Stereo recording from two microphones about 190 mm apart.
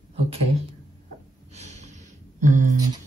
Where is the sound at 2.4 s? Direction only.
40° right (ahead or behind).